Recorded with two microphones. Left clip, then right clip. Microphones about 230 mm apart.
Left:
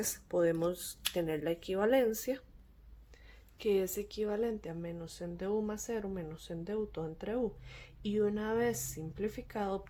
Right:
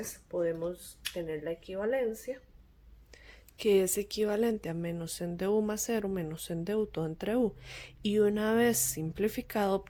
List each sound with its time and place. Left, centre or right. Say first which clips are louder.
0.0 s speech: left 1 dB; left
3.1 s speech: right 6 dB; right